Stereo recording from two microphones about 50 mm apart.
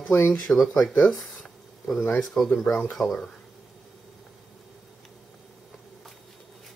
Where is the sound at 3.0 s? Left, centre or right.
Left.